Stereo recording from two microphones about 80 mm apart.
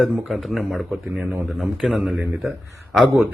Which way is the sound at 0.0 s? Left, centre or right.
Centre.